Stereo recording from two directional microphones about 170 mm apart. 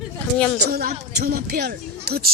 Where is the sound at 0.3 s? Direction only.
5° left (ahead or behind).